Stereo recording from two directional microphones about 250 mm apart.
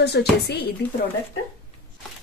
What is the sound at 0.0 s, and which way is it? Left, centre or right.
Speech, left.